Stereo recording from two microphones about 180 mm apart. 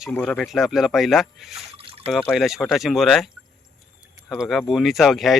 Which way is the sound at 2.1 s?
Centre (ahead or behind).